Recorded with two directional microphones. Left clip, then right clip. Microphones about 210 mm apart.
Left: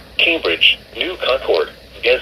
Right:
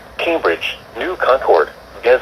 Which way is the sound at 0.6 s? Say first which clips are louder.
Left 9 dB; 50° right (ahead or behind).